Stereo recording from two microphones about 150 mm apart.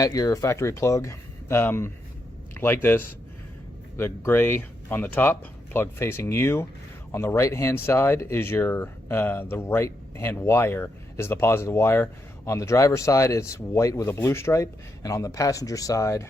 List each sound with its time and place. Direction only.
0.0 s speech: 25° left (ahead or behind)